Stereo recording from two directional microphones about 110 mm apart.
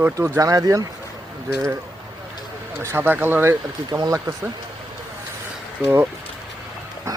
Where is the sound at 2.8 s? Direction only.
20° right (ahead or behind).